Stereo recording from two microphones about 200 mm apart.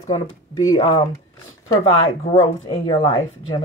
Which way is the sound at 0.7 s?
30° left (ahead or behind).